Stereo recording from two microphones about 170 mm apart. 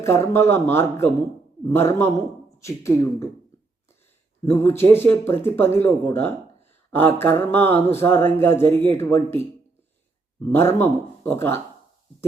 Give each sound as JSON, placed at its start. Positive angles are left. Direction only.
{"t": 0.0, "sound": "speech", "side_deg": 15}
{"t": 4.4, "sound": "speech", "side_deg": 15}